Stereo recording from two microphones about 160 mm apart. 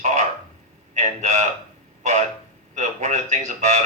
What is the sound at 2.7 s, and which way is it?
Speech, 50° right (ahead or behind).